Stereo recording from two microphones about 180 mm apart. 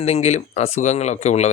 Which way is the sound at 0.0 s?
35° left (ahead or behind).